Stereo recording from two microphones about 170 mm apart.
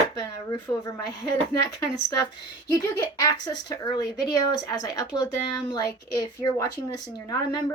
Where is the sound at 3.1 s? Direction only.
20° left (ahead or behind).